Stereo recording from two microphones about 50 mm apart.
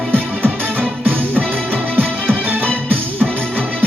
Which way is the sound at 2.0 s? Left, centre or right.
Right.